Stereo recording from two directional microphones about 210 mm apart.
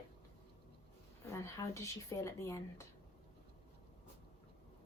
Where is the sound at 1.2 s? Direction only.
15° left (ahead or behind).